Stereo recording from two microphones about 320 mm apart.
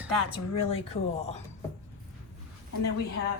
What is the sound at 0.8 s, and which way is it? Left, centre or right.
Speech, centre.